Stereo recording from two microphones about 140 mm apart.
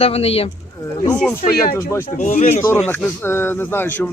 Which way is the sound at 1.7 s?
15° left (ahead or behind).